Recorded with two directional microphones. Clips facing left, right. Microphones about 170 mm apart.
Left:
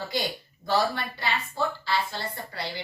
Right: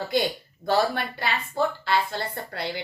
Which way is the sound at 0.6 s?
55° right (ahead or behind).